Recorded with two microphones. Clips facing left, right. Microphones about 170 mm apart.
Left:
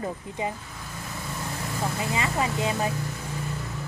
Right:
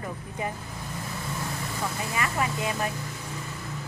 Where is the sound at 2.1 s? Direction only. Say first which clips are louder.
Left 1 dB; 25° left (ahead or behind).